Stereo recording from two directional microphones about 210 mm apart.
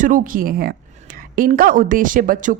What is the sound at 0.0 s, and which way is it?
Speech, 40° right (ahead or behind).